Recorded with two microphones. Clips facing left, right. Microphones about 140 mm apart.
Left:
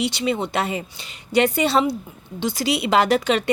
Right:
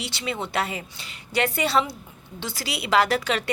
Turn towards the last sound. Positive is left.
turn(degrees=20)  # may be behind; listen again after turning